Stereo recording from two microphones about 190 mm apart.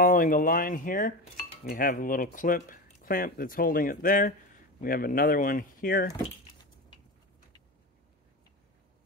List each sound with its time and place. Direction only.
0.0 s speech: 45° left (ahead or behind)
6.1 s dishes: 20° left (ahead or behind)